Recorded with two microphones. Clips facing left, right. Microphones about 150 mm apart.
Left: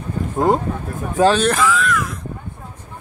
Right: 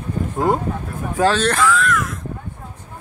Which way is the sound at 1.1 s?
15° left (ahead or behind).